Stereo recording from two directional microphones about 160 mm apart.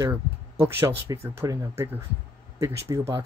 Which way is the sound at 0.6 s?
15° right (ahead or behind).